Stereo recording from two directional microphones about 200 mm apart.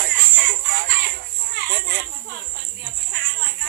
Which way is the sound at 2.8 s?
55° right (ahead or behind).